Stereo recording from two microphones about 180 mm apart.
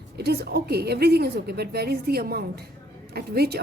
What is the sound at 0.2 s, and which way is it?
A woman's voice, 60° right (ahead or behind).